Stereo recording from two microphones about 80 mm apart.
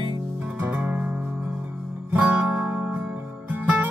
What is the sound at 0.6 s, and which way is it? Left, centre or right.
Music, centre.